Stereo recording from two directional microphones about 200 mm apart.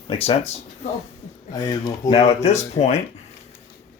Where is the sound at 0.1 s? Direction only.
30° left (ahead or behind).